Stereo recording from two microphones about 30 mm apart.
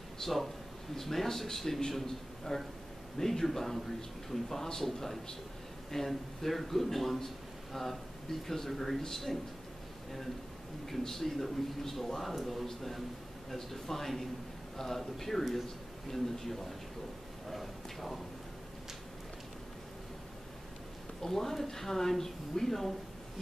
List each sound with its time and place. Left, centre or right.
0.2 s a man's voice: centre
5.9 s a man's voice: centre
10.9 s a man's voice: centre
14.8 s a man's voice: centre
17.5 s a sound: centre
21.2 s a man's voice: centre